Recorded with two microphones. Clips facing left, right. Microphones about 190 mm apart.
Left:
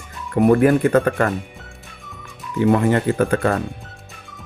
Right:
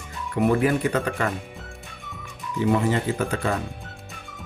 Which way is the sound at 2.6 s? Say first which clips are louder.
Left 5 dB; 60° left (ahead or behind).